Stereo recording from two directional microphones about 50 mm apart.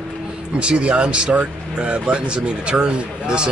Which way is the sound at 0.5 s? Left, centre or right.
Right.